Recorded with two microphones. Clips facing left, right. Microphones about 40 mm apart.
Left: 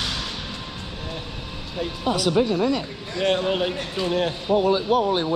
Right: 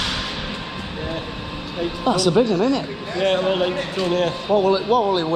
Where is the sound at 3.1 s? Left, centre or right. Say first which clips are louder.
Right 3 dB; centre.